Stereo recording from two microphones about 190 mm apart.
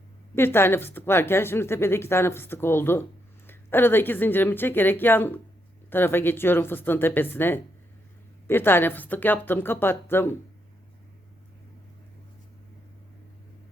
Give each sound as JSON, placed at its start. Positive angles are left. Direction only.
{"t": 0.3, "sound": "a woman's voice", "side_deg": 10}